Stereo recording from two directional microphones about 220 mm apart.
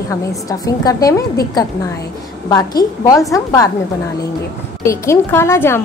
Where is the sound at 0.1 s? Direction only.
15° left (ahead or behind).